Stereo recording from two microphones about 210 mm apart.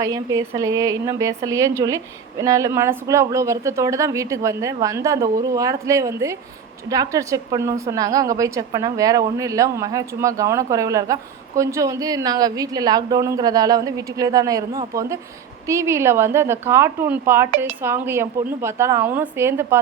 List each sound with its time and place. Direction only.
0.0 s a woman's voice: 15° right (ahead or behind)